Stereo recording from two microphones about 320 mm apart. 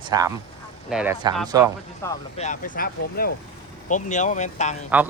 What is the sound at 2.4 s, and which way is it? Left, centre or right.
Speech, left.